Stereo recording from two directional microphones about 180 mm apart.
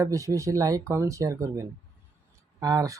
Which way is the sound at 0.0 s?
15° right (ahead or behind).